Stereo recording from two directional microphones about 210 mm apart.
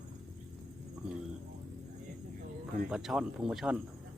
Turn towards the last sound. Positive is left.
turn(degrees=-5)  # may be behind; listen again after turning